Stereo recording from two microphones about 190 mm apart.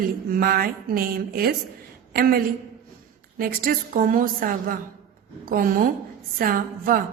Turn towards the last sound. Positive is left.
turn(degrees=-50)  # may be behind; listen again after turning